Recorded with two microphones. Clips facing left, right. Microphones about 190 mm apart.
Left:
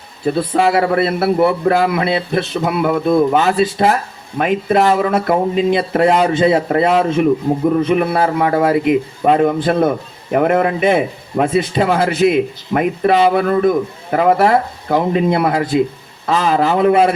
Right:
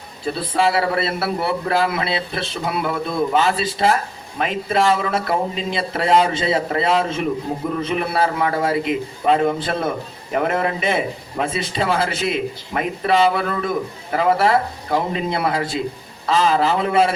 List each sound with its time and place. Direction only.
0.3 s a man's voice: 50° left (ahead or behind)